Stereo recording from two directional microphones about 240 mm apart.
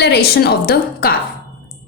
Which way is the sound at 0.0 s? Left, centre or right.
Left.